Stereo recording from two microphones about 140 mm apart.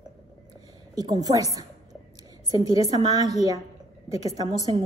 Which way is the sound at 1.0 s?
30° right (ahead or behind).